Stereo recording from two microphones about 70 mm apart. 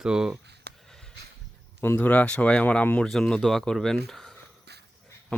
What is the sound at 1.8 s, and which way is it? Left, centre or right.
Speech, left.